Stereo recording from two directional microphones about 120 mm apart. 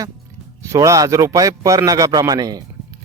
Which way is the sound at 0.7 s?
25° right (ahead or behind).